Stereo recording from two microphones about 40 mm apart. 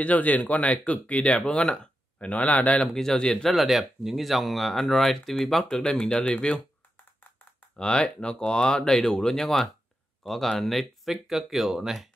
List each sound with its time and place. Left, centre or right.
0.0 s speech: left
2.1 s speech: left
2.8 s speech: centre
3.4 s speech: centre
5.8 s speech: left
7.7 s speech: left; by 12.1 s centre